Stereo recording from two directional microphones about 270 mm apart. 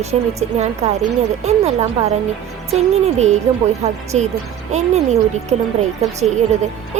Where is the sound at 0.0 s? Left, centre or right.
Right.